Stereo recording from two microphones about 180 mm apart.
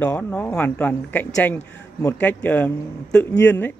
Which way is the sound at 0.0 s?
10° left (ahead or behind).